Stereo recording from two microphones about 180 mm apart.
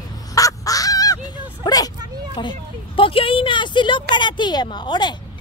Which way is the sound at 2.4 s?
25° left (ahead or behind).